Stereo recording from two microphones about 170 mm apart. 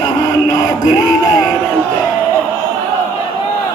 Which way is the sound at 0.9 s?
20° left (ahead or behind).